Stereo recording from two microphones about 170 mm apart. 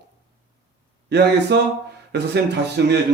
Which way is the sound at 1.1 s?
75° right (ahead or behind).